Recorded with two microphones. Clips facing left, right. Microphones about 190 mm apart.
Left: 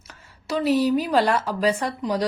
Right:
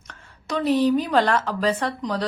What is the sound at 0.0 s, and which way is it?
A woman's voice, 5° left (ahead or behind).